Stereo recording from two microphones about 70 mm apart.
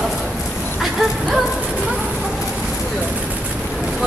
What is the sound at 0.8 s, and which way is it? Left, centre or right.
Speech, centre.